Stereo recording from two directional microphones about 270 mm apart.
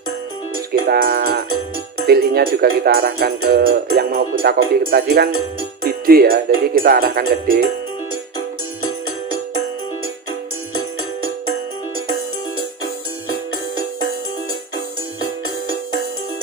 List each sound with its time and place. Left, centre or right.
0.8 s speech: right